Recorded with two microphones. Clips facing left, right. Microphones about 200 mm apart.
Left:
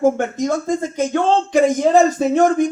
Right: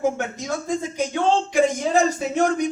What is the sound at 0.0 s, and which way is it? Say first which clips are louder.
Speech: left 7 dB; 50° left (ahead or behind).